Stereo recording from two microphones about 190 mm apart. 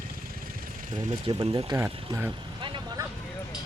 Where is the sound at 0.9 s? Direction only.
25° right (ahead or behind).